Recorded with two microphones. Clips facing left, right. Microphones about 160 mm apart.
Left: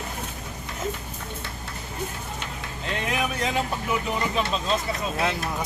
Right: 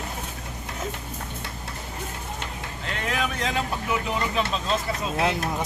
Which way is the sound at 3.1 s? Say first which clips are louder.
Even; 10° left (ahead or behind).